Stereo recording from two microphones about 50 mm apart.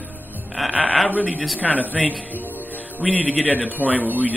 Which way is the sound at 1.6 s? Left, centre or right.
Left.